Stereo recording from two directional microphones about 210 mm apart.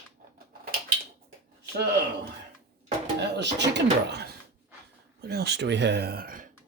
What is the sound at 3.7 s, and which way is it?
Speech, 50° right (ahead or behind).